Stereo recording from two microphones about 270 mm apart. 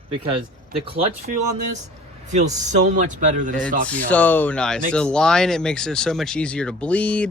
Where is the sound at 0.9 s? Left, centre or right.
Right.